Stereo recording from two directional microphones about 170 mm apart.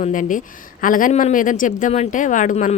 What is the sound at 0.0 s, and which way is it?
Speech, 50° left (ahead or behind).